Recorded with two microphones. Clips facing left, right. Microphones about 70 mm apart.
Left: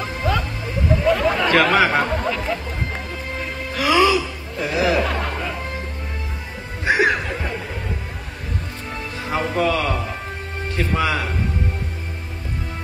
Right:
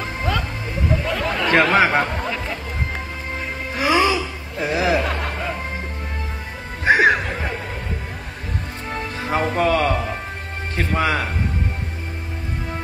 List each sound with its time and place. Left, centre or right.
0.0 s music: centre
1.5 s speech: centre
3.7 s music: right
5.0 s a sound: centre
6.8 s music: right
8.9 s music: right
11.0 s a man's voice: right